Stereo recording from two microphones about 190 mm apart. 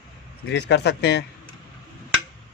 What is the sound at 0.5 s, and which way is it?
Speech, 60° left (ahead or behind).